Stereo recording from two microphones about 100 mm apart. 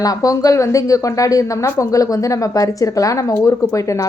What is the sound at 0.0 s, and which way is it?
A woman's voice, 35° left (ahead or behind).